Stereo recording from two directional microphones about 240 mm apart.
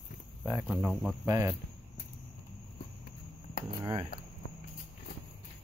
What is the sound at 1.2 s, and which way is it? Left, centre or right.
Speech, centre.